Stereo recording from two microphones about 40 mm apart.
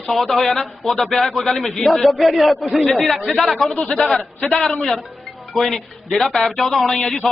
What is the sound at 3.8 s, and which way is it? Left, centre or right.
Speech, centre.